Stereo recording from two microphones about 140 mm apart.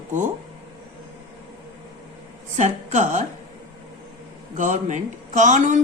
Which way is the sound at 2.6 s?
55° right (ahead or behind).